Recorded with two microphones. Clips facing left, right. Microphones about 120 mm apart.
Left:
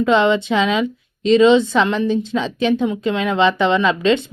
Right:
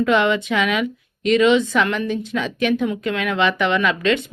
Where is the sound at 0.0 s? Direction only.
25° left (ahead or behind).